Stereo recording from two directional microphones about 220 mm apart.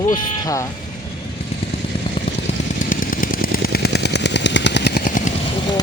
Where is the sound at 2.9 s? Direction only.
40° left (ahead or behind).